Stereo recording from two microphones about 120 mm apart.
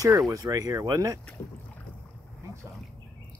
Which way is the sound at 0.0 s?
25° right (ahead or behind).